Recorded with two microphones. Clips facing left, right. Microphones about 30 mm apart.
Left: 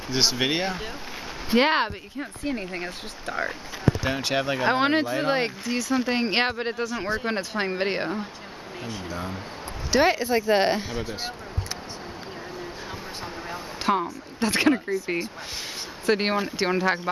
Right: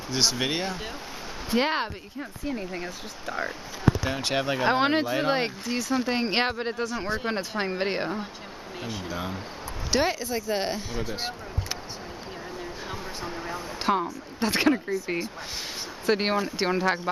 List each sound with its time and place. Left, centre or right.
0.1 s speech: centre
4.2 s speech: centre
10.0 s speech: left
10.9 s speech: centre
13.2 s a sound: centre
14.4 s speech: centre
16.1 s speech: centre